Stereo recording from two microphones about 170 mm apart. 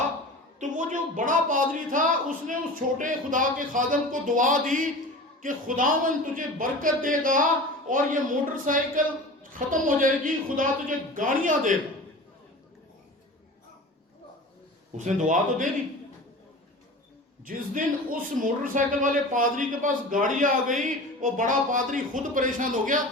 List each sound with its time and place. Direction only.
0.6 s a man's voice: 45° right (ahead or behind)
14.9 s a man's voice: 45° right (ahead or behind)
17.4 s a man's voice: 55° right (ahead or behind)